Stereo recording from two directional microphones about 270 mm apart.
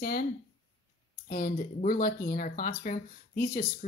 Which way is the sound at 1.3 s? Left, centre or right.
Left.